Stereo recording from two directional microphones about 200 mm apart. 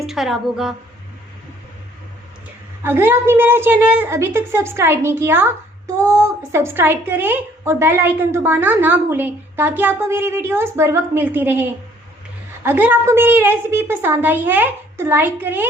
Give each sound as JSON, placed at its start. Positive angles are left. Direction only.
{"t": 0.0, "sound": "a woman's voice", "side_deg": 0}
{"t": 2.8, "sound": "a woman's voice", "side_deg": -10}